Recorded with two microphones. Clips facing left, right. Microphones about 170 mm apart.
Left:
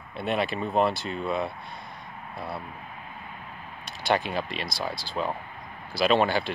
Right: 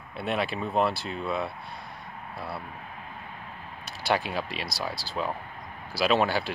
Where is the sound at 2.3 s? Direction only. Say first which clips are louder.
Left 2 dB; 20° left (ahead or behind).